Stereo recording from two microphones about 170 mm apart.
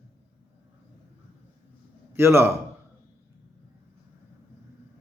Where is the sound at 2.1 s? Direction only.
15° right (ahead or behind).